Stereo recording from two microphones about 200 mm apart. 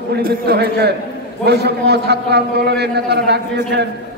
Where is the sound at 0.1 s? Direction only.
50° right (ahead or behind).